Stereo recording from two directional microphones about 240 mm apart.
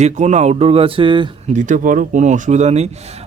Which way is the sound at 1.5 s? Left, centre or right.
Right.